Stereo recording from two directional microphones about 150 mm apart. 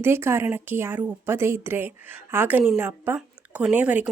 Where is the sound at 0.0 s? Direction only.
15° right (ahead or behind).